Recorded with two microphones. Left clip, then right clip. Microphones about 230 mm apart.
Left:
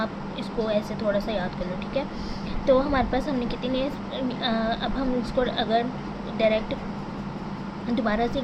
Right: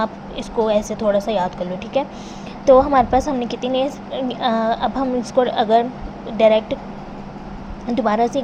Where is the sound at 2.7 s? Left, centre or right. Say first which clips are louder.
Right 9 dB; right.